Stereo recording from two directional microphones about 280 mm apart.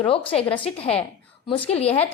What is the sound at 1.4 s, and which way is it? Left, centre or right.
Speech, centre.